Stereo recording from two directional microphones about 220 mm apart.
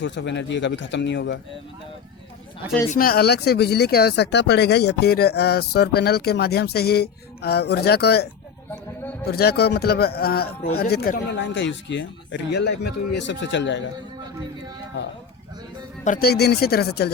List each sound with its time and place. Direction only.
0.0 s speech: 55° left (ahead or behind)
2.9 s speech: 40° left (ahead or behind)
16.0 s speech: 40° left (ahead or behind)